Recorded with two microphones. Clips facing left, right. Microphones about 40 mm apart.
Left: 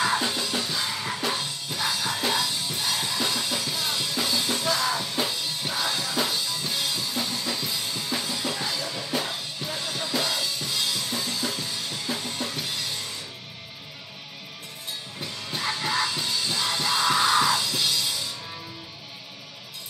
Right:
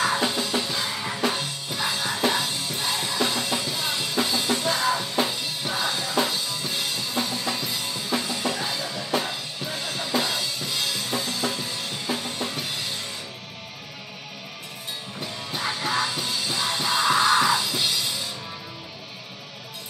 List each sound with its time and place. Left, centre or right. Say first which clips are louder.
0.2 s music: right 3 dB; centre
7.5 s drum kit: right 1 dB; centre
8.4 s music: right 2 dB; centre
9.7 s drum kit: right 2 dB; centre
15.5 s music: right 1 dB; centre